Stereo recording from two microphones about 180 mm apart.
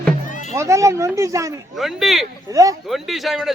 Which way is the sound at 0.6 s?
15° right (ahead or behind).